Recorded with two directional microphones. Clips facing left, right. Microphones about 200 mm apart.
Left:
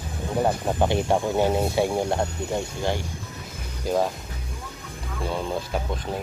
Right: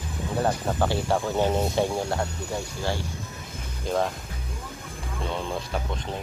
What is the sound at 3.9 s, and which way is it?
Speech, 5° left (ahead or behind).